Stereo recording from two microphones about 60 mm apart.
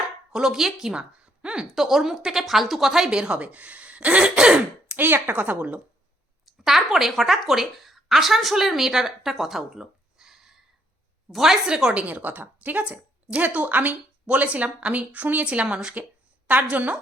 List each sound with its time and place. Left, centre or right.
0.3 s a woman's voice: centre
1.7 s speech: centre
4.9 s a woman's voice: right
6.4 s speech: centre
12.0 s speech: right
15.6 s speech: centre